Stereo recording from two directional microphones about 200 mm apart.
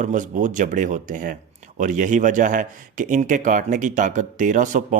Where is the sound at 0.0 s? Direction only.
40° right (ahead or behind).